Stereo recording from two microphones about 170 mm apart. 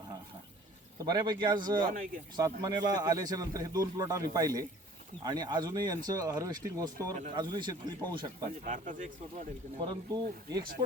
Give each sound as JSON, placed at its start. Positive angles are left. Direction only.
{"t": 1.0, "sound": "speech", "side_deg": -25}
{"t": 8.4, "sound": "speech", "side_deg": -50}
{"t": 10.1, "sound": "speech", "side_deg": -25}